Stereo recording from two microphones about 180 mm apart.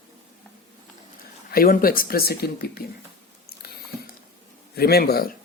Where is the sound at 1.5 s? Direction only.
55° left (ahead or behind).